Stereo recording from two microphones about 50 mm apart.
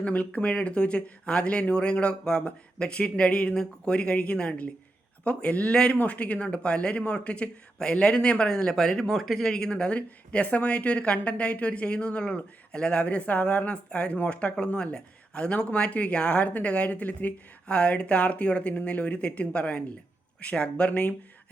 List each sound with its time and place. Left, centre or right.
0.0 s speech: left
0.3 s speech: left